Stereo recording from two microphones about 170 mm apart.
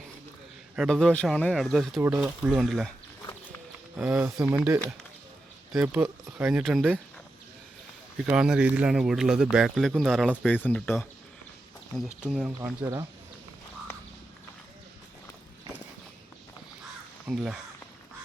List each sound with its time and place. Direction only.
0.8 s speech: centre (ahead or behind)
2.0 s speech: 15° right (ahead or behind)
2.2 s speech: centre (ahead or behind)
3.9 s speech: 5° right (ahead or behind)
4.4 s speech: 20° right (ahead or behind)
5.7 s speech: 5° right (ahead or behind)
8.3 s speech: 5° right (ahead or behind)
12.2 s speech: 5° right (ahead or behind)
12.6 s speech: 20° right (ahead or behind)
17.2 s speech: 5° right (ahead or behind)